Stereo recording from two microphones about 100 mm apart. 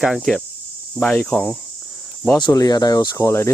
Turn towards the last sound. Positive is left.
turn(degrees=30)  # may be behind; listen again after turning